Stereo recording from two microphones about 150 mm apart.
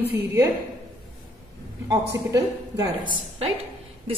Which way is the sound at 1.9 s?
20° right (ahead or behind).